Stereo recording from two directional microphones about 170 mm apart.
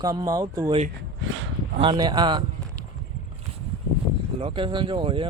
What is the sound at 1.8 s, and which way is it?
Speech, 25° right (ahead or behind).